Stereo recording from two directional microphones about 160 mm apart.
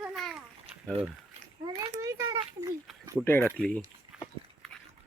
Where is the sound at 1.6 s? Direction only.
20° right (ahead or behind).